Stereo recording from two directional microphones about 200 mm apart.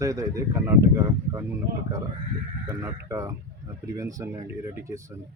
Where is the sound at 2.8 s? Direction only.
15° right (ahead or behind).